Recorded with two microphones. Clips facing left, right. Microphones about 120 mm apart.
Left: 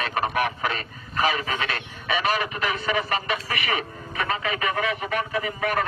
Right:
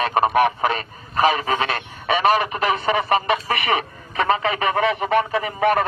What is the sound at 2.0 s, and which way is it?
Speech, 55° right (ahead or behind).